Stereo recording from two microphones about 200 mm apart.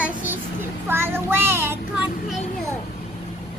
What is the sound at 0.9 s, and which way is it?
Child singing, 10° right (ahead or behind).